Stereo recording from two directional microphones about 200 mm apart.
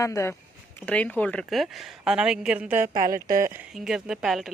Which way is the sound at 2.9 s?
45° right (ahead or behind).